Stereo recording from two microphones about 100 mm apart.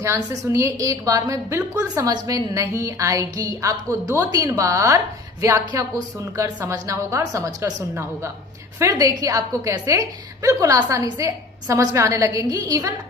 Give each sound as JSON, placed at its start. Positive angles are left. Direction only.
{"t": 0.0, "sound": "a woman's voice", "side_deg": -30}